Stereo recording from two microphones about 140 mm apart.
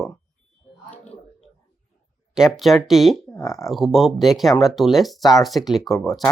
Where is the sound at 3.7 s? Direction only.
Centre (ahead or behind).